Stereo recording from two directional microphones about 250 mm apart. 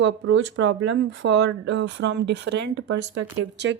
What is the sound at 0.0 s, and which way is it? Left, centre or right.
A woman's voice, right.